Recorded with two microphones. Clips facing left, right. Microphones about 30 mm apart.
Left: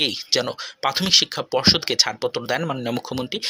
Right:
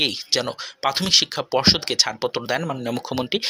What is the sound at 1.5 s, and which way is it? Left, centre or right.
Speech, centre.